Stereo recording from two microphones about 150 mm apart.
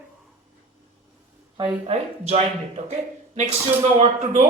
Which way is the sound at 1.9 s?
45° right (ahead or behind).